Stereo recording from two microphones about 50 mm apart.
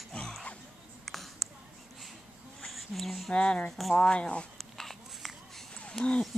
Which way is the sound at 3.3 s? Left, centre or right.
Centre.